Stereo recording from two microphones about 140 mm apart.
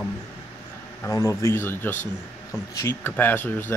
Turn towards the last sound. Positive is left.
turn(degrees=15)  # may be behind; listen again after turning